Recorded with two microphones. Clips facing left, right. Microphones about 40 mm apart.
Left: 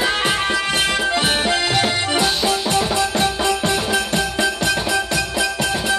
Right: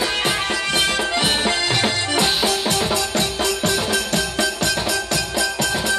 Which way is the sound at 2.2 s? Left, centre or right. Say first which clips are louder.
Right 2 dB; centre.